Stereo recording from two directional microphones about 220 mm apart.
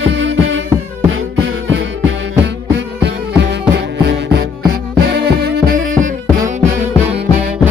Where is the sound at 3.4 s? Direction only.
50° right (ahead or behind).